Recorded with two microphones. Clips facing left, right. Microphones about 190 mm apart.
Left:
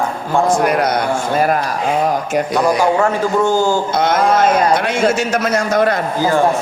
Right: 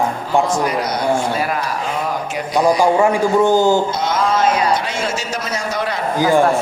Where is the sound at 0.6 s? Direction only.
60° left (ahead or behind).